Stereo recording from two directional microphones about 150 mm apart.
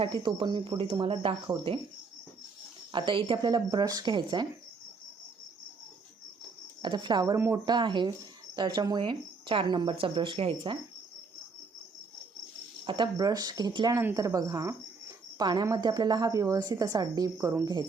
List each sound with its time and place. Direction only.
0.0 s speech: 30° right (ahead or behind)
2.9 s a woman's voice: 35° right (ahead or behind)
6.8 s a woman's voice: 30° right (ahead or behind)
12.8 s a woman's voice: 35° right (ahead or behind); by 17.7 s 15° right (ahead or behind)